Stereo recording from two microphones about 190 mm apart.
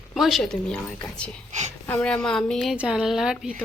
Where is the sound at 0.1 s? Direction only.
Centre (ahead or behind).